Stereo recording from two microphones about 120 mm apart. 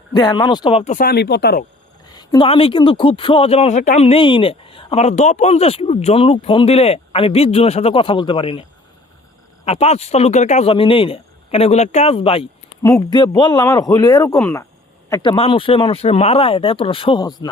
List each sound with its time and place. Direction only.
0.1 s speech: 35° left (ahead or behind)
2.0 s a sound: 35° left (ahead or behind)
2.4 s speech: 50° left (ahead or behind)
9.6 s speech: 60° left (ahead or behind)
10.7 s speech: 50° left (ahead or behind)
12.8 s speech: 30° left (ahead or behind)
15.4 s speech: 50° left (ahead or behind)